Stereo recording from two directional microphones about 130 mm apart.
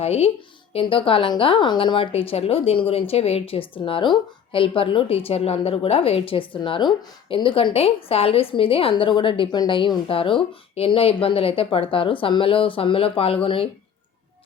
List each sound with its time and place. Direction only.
0.0 s a woman's voice: 55° left (ahead or behind)